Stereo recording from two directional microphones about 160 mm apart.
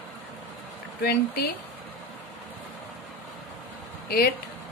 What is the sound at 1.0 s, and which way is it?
Speech, 75° left (ahead or behind).